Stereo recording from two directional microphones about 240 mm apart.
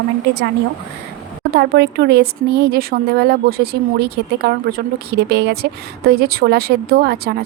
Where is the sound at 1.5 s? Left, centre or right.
Right.